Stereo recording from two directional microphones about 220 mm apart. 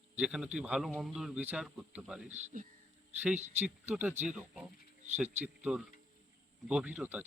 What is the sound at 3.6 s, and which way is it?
A man's voice, 10° right (ahead or behind).